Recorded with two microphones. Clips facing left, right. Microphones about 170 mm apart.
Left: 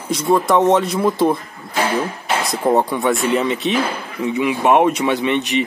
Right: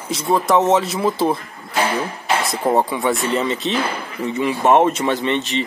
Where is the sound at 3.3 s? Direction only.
15° left (ahead or behind).